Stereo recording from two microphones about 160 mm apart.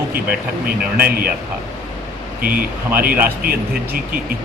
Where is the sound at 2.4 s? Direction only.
65° right (ahead or behind).